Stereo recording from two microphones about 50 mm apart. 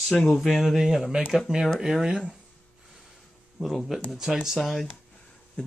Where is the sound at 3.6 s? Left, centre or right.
Centre.